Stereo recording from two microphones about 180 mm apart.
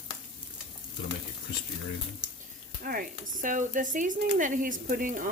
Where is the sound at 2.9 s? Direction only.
55° right (ahead or behind).